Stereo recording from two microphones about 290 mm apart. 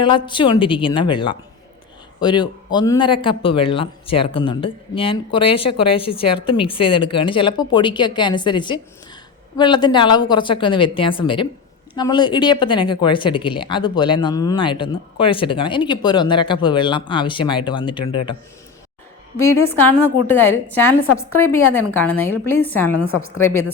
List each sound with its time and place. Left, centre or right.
0.0 s speech: centre
20.2 s speech: centre
23.1 s a woman's voice: left